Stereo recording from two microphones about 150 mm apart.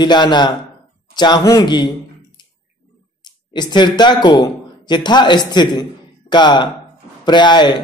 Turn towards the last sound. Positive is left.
turn(degrees=30)  # may be behind; listen again after turning